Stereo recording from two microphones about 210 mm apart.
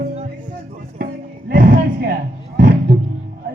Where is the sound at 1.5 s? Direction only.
40° right (ahead or behind).